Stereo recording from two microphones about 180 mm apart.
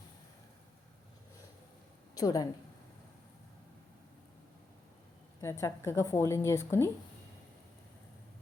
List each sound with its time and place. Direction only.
2.1 s a woman's voice: 20° left (ahead or behind)
5.4 s a woman's voice: 15° left (ahead or behind)